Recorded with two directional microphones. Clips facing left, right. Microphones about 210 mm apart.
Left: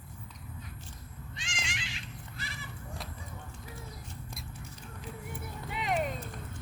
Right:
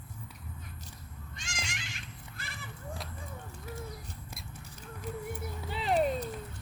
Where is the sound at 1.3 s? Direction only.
45° right (ahead or behind).